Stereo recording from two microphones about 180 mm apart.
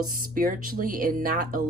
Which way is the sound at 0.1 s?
50° right (ahead or behind).